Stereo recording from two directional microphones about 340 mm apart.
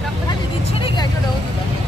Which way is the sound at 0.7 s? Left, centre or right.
Centre.